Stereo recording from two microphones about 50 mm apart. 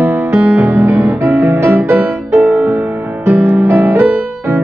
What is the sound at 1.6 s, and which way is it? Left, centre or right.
Music, right.